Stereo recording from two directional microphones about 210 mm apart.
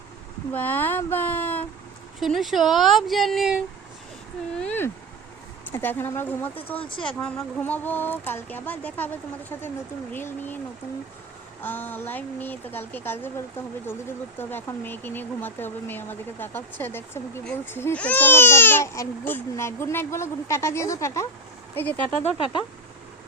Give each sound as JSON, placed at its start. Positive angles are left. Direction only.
{"t": 0.5, "sound": "speech", "side_deg": 10}
{"t": 11.6, "sound": "speech", "side_deg": 10}
{"t": 14.3, "sound": "speech", "side_deg": 10}
{"t": 22.2, "sound": "speech", "side_deg": 30}